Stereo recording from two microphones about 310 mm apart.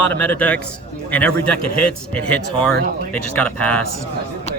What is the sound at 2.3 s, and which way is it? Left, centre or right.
Speech, left.